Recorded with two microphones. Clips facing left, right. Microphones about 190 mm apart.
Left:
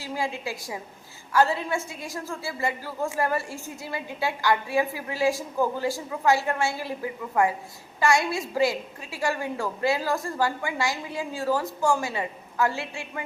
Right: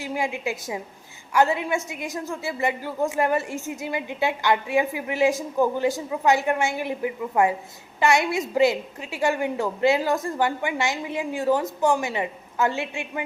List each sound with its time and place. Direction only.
0.0 s a woman's voice: 15° right (ahead or behind)